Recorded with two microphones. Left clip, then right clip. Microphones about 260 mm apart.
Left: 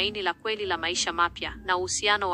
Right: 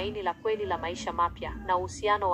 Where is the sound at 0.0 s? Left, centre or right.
Left.